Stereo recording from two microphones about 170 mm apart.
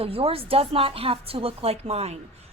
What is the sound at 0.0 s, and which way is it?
A woman's voice, 35° right (ahead or behind).